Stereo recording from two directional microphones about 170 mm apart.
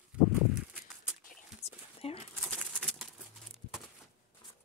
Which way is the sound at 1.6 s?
40° left (ahead or behind).